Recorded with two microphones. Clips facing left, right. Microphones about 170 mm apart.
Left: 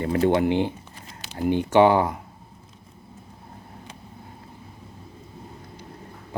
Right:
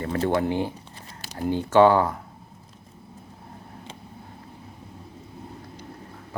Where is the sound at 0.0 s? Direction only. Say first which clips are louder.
Left 3 dB; 20° left (ahead or behind).